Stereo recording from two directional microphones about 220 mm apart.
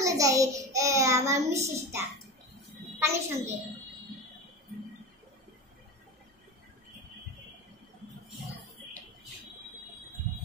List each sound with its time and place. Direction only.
0.0 s a child's voice: 15° right (ahead or behind)